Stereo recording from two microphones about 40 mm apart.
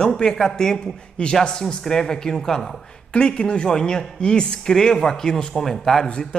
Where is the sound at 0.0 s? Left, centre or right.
Centre.